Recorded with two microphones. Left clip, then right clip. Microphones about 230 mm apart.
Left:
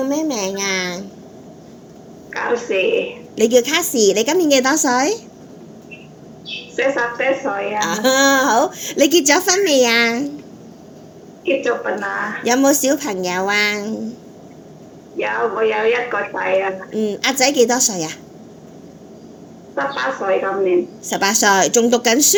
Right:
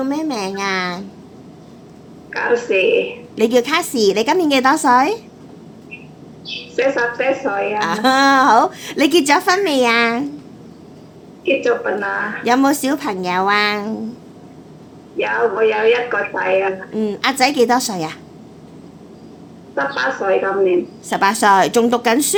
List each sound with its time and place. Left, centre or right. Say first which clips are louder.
0.0 s a woman's voice: left 1 dB; centre
2.3 s a woman's voice: right 3 dB; centre
6.4 s a woman's voice: right 1 dB; centre
11.4 s a woman's voice: right 2 dB; centre
15.2 s a woman's voice: right 2 dB; centre
19.7 s a woman's voice: right 2 dB; centre